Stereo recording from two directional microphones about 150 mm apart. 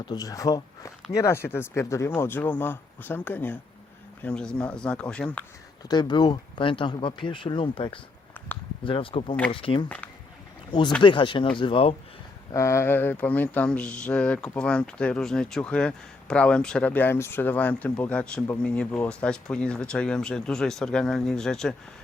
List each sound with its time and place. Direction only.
0.0 s speech: 25° left (ahead or behind); by 5.4 s 5° left (ahead or behind)
5.9 s speech: 30° left (ahead or behind)
12.5 s speech: 20° left (ahead or behind); by 21.8 s 5° left (ahead or behind)